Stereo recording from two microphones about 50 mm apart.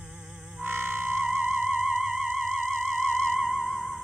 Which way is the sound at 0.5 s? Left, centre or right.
Right.